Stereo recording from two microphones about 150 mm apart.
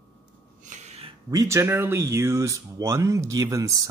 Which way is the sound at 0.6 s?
50° right (ahead or behind).